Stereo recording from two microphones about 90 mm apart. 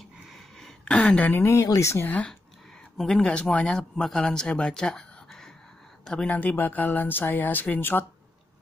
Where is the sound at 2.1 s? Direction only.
15° left (ahead or behind).